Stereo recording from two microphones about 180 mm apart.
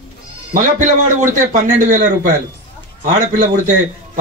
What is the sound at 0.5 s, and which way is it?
A man's voice, 45° right (ahead or behind).